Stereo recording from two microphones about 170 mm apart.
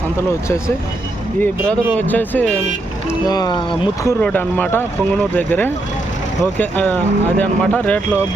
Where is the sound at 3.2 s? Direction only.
25° left (ahead or behind).